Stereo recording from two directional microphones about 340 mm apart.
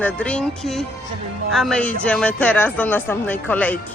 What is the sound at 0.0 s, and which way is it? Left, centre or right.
Speech, centre.